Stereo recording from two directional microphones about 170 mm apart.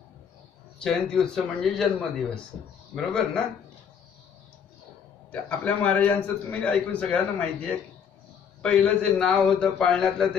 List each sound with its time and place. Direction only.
0.7 s a man's voice: 5° left (ahead or behind)
5.3 s a man's voice: 5° left (ahead or behind)